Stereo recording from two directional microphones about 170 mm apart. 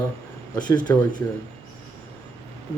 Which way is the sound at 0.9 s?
15° left (ahead or behind).